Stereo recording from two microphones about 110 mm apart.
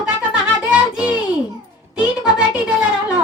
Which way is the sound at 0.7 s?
10° right (ahead or behind).